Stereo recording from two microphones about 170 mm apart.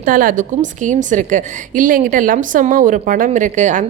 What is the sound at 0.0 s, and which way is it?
A woman's voice, 55° right (ahead or behind).